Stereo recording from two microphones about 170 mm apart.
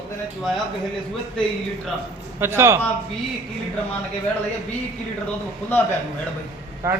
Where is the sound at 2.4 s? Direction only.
15° right (ahead or behind).